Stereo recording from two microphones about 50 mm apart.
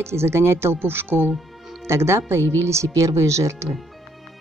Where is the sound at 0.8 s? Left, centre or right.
Right.